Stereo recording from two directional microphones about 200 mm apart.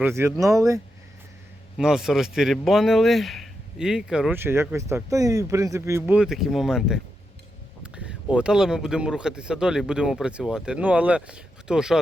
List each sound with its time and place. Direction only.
0.0 s speech: 10° right (ahead or behind)
1.8 s speech: centre (ahead or behind)